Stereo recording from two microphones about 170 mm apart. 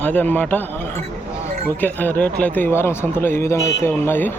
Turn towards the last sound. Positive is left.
turn(degrees=15)  # may be behind; listen again after turning